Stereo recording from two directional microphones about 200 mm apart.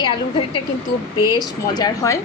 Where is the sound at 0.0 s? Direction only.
25° left (ahead or behind).